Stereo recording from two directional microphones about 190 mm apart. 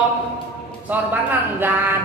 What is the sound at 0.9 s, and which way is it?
Speech, 10° right (ahead or behind).